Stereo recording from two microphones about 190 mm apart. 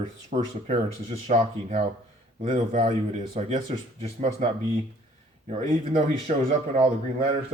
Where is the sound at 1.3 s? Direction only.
40° right (ahead or behind).